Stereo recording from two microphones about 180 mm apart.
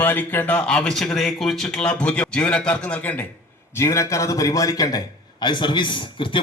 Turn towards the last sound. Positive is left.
turn(degrees=30)  # may be behind; listen again after turning